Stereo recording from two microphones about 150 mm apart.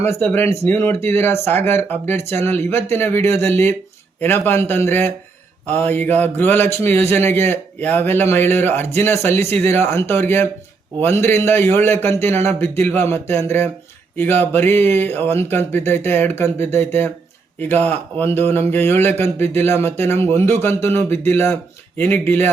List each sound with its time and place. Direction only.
0.0 s a man's voice: 15° left (ahead or behind)